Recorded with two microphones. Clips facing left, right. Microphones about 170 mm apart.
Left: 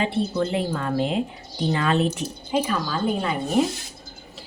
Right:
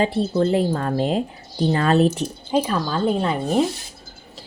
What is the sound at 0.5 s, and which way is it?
A woman's voice, 35° right (ahead or behind).